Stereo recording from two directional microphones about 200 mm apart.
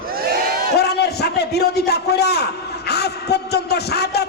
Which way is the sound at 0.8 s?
55° left (ahead or behind).